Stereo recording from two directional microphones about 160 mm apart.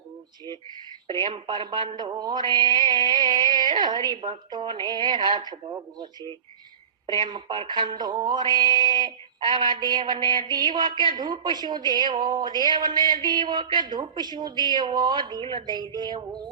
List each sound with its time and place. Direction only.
1.5 s music: 30° right (ahead or behind)
7.1 s music: 30° right (ahead or behind)